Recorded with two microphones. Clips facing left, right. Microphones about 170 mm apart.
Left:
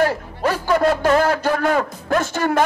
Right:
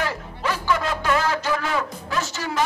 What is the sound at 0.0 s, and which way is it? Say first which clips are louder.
A man's voice: left 8 dB; 45° left (ahead or behind).